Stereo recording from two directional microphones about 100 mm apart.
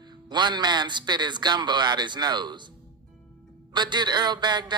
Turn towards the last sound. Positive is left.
turn(degrees=-50)  # may be behind; listen again after turning